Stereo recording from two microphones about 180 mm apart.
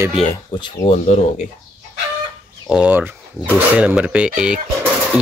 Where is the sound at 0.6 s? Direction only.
30° left (ahead or behind).